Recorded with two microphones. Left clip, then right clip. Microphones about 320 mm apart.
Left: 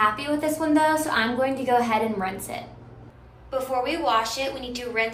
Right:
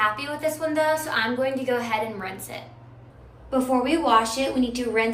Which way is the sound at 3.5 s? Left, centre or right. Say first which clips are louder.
Right 3 dB; centre.